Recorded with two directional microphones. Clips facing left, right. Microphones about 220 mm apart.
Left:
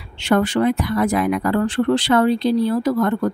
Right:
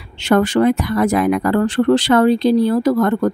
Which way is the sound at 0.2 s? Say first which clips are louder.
Right 3 dB; 45° right (ahead or behind).